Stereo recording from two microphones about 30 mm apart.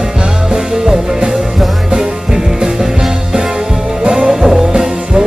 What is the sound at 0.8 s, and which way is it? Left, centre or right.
Music, centre.